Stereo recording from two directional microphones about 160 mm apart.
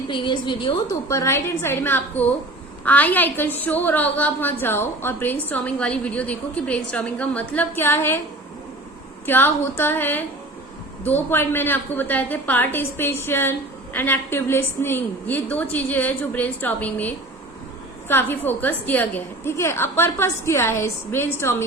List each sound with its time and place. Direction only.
0.1 s a woman's voice: 30° left (ahead or behind); by 8.2 s 15° left (ahead or behind)
9.2 s a woman's voice: 15° left (ahead or behind)